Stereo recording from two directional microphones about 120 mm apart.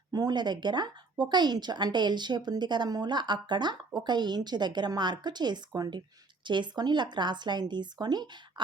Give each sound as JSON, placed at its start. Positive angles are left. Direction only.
{"t": 0.1, "sound": "a woman's voice", "side_deg": -35}